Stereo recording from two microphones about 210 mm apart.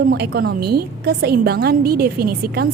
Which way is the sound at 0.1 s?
50° right (ahead or behind).